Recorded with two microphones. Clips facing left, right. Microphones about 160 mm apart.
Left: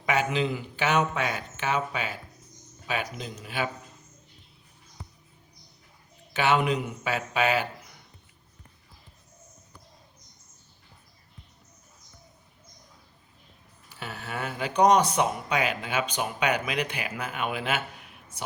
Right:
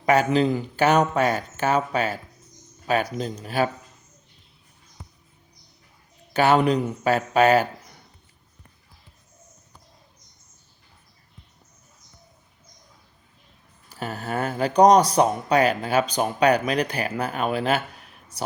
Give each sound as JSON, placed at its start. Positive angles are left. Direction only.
{"t": 0.0, "sound": "speech", "side_deg": -40}
{"t": 6.3, "sound": "speech", "side_deg": -40}
{"t": 13.9, "sound": "speech", "side_deg": -40}